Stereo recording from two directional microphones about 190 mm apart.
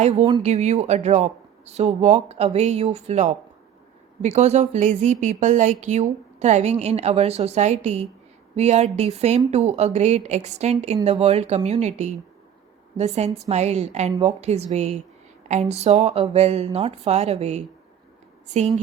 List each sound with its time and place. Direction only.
0.4 s a woman's voice: 35° right (ahead or behind)